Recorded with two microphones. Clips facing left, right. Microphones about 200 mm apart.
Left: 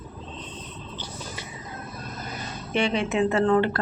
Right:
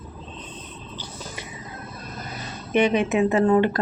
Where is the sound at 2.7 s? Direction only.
15° right (ahead or behind).